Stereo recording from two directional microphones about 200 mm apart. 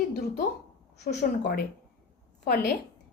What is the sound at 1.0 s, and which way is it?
A woman's voice, 55° left (ahead or behind).